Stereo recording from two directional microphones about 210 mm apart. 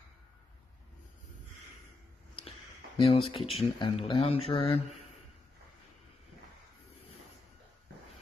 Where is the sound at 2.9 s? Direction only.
25° left (ahead or behind).